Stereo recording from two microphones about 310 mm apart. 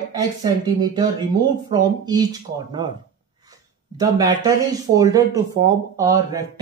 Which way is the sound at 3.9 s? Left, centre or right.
Centre.